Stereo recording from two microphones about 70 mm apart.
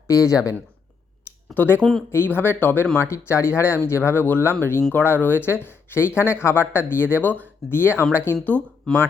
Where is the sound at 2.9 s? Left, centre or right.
Left.